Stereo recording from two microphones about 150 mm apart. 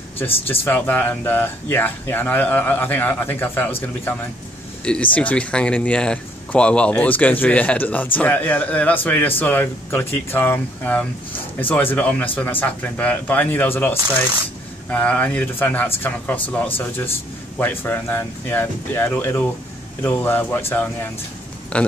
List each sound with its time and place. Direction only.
0.5 s speech: 10° left (ahead or behind)